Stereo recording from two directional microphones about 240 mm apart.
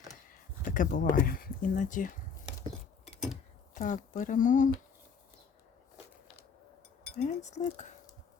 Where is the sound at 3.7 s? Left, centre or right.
Left.